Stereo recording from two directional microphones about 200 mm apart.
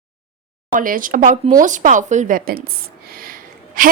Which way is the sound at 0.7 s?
45° right (ahead or behind).